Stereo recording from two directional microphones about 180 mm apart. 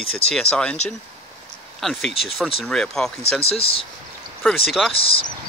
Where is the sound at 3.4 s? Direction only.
35° left (ahead or behind).